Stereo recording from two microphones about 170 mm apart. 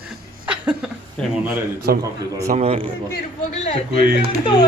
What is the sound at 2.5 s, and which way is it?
Speech, 35° right (ahead or behind).